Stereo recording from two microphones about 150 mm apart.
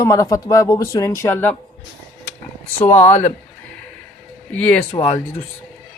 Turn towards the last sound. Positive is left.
turn(degrees=45)  # may be behind; listen again after turning